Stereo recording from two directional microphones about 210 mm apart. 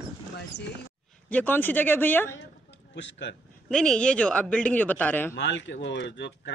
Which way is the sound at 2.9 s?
55° left (ahead or behind).